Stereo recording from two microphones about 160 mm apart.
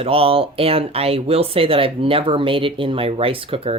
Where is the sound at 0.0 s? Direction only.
35° right (ahead or behind).